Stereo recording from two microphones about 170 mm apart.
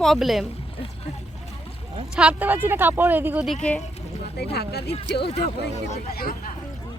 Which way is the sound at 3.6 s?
10° left (ahead or behind).